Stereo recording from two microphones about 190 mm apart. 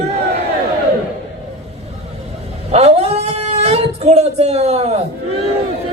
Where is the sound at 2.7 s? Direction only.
35° right (ahead or behind).